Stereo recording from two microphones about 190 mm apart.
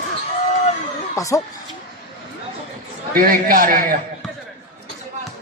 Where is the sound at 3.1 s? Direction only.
50° right (ahead or behind).